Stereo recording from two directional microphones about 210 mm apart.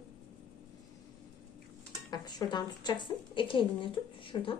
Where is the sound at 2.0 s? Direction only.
20° left (ahead or behind).